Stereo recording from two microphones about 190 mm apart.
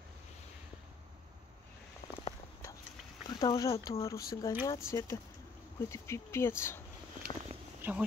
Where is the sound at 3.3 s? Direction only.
20° left (ahead or behind).